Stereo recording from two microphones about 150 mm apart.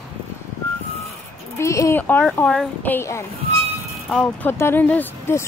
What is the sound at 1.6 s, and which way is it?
Speech, 20° left (ahead or behind).